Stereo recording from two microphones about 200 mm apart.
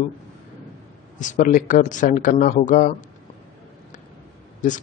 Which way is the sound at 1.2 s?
40° left (ahead or behind).